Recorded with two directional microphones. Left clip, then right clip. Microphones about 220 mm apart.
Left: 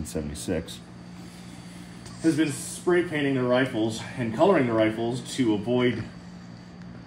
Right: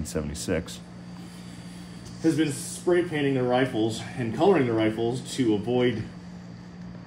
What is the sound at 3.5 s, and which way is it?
Speech, 15° left (ahead or behind).